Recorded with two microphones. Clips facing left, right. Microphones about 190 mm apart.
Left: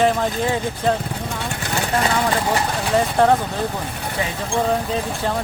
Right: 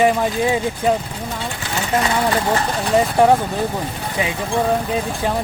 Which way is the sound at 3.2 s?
10° right (ahead or behind).